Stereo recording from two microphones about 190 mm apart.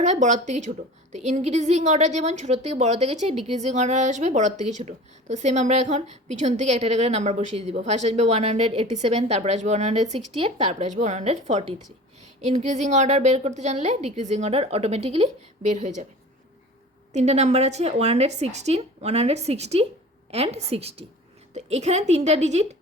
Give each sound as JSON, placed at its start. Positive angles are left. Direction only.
{"t": 0.0, "sound": "a woman's voice", "side_deg": -40}
{"t": 17.1, "sound": "a woman's voice", "side_deg": -35}